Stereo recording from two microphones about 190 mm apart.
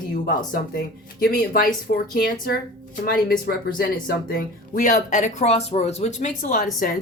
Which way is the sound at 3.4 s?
50° left (ahead or behind).